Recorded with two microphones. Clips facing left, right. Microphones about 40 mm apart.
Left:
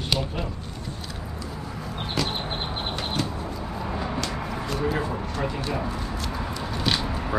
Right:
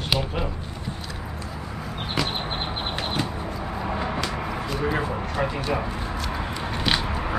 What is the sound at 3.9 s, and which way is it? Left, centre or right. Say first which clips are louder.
Vehicle: right 3 dB; right.